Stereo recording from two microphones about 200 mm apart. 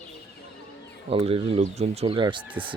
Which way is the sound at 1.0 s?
30° right (ahead or behind).